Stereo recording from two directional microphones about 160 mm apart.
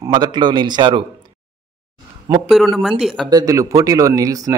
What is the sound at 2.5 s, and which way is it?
Speech, centre (ahead or behind).